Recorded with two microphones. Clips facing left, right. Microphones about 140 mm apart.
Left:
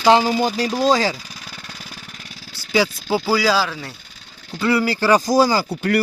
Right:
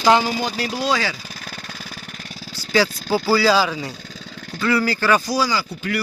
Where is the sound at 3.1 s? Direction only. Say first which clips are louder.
Right 2 dB; 10° left (ahead or behind).